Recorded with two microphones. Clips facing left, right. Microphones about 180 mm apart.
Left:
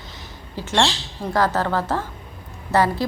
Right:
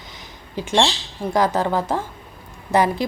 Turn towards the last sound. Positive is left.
turn(degrees=-15)  # may be behind; listen again after turning